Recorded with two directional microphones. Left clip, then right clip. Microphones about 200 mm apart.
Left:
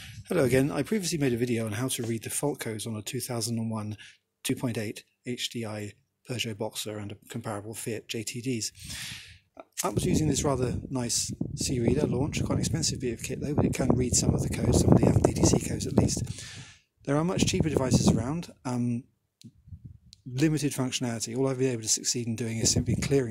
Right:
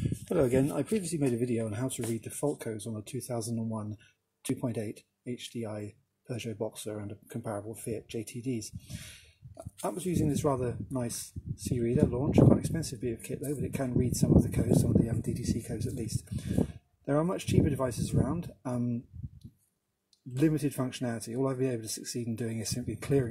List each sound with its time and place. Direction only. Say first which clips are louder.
0.0 s speech: left 2 dB; 15° left (ahead or behind)
20.3 s speech: left 2 dB; 25° left (ahead or behind)